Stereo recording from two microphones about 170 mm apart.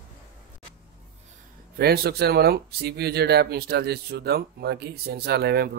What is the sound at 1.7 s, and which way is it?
Speech, 70° right (ahead or behind).